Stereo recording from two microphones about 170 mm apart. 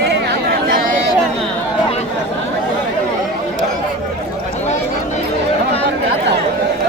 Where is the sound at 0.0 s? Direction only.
75° right (ahead or behind).